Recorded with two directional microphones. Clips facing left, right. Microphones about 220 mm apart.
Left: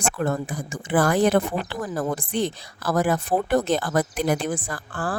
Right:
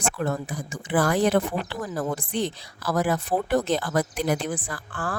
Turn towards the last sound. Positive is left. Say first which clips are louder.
# left 3 dB
turn(degrees=40)  # may be behind; listen again after turning